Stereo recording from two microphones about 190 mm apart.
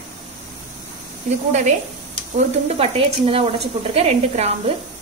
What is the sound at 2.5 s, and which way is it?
Speech, 35° right (ahead or behind).